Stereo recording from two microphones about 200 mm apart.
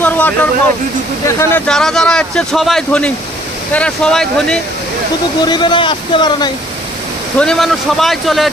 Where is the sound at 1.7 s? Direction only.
Centre (ahead or behind).